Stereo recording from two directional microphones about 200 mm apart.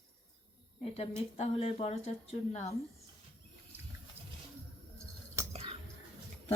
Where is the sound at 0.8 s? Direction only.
30° left (ahead or behind).